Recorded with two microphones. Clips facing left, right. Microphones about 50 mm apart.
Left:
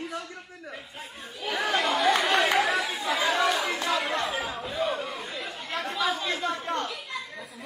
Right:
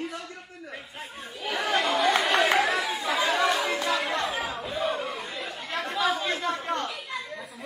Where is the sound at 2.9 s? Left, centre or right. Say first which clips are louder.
Right 1 dB; right.